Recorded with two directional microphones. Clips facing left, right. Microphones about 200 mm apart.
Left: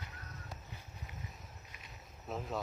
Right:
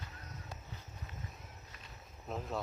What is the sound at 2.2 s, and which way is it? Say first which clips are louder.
Speech: even; centre (ahead or behind).